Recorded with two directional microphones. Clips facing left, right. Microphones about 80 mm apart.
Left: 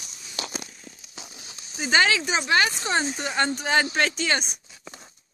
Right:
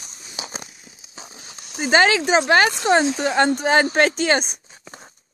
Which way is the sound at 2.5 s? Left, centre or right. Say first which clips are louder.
Right 5 dB; right.